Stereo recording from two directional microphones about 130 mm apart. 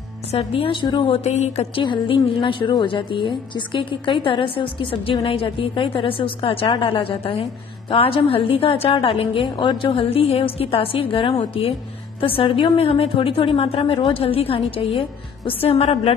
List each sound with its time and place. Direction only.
0.3 s a woman's voice: 50° left (ahead or behind)
1.8 s a woman's voice: 40° left (ahead or behind)